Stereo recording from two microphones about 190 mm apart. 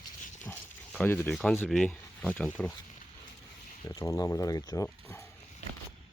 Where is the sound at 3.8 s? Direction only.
15° left (ahead or behind).